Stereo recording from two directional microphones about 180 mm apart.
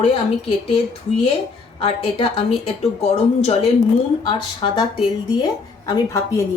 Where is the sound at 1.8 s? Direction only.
30° left (ahead or behind).